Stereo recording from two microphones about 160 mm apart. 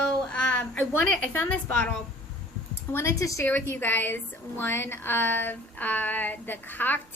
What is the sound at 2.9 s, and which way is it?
A woman's voice, 15° left (ahead or behind).